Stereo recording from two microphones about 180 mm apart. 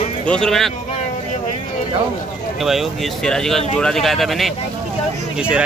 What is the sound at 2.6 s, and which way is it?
A man's voice, centre (ahead or behind).